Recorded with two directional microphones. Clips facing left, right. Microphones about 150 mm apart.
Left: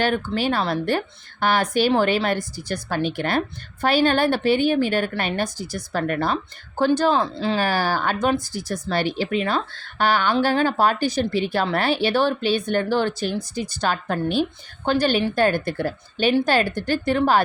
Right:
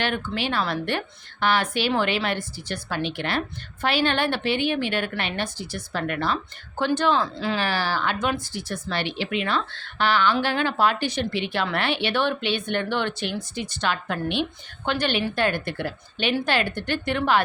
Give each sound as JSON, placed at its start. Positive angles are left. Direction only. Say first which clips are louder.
{"t": 0.0, "sound": "speech", "louder": "left 5 dB", "side_deg": 40}
{"t": 7.6, "sound": "speech", "louder": "left 4 dB", "side_deg": 45}